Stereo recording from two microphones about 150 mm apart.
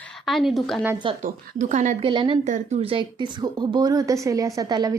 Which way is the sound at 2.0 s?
35° right (ahead or behind).